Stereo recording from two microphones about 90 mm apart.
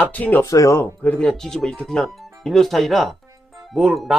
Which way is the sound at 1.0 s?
15° left (ahead or behind).